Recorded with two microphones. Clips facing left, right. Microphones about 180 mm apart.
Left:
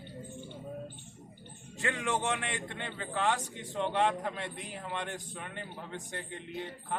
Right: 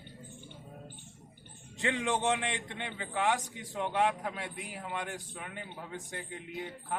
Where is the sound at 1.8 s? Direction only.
20° right (ahead or behind).